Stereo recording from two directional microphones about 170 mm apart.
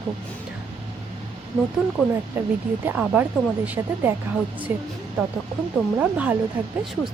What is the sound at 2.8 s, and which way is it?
Speech, 10° right (ahead or behind).